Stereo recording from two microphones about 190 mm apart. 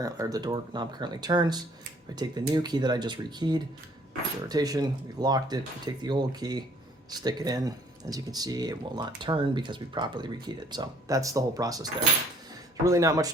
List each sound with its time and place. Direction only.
0.0 s speech: 20° right (ahead or behind)